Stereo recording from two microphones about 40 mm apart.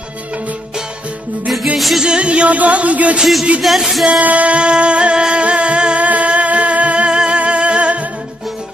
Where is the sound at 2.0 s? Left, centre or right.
Right.